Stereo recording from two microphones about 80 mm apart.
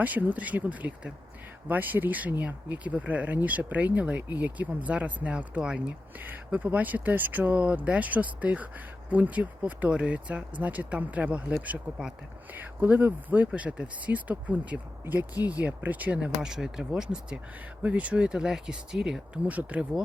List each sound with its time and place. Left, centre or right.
0.0 s speech: right
19.5 s speech: centre